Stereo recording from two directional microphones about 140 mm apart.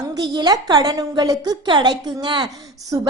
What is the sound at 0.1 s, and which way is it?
A woman's voice, 30° right (ahead or behind).